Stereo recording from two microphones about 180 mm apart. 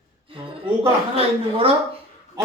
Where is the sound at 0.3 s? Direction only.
30° right (ahead or behind).